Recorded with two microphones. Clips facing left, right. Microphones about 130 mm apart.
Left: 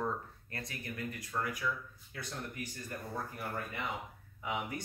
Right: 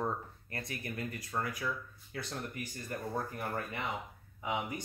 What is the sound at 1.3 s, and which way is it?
Speech, 35° right (ahead or behind).